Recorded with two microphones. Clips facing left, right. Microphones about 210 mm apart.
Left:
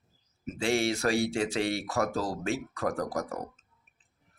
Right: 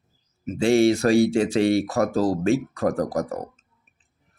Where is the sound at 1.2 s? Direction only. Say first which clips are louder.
Right 9 dB; 40° right (ahead or behind).